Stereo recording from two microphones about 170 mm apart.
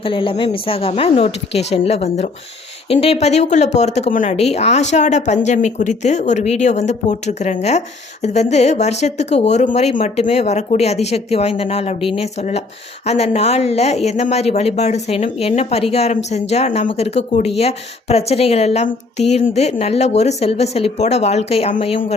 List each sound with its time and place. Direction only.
0.0 s speech: 30° left (ahead or behind)